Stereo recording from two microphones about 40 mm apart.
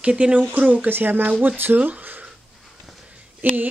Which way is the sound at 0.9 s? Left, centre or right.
Right.